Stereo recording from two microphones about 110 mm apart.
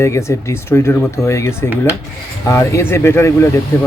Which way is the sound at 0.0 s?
25° left (ahead or behind).